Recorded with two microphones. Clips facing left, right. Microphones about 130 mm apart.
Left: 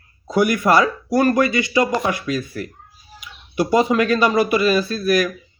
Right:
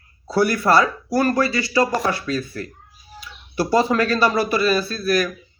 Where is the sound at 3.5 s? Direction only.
15° left (ahead or behind).